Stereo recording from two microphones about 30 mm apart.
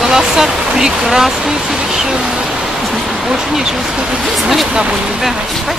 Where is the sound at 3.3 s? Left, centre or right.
Centre.